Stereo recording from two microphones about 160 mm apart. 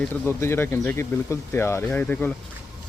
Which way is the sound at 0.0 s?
15° left (ahead or behind).